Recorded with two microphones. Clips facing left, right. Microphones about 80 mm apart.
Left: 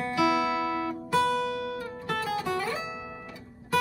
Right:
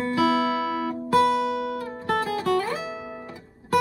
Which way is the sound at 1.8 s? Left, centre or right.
Right.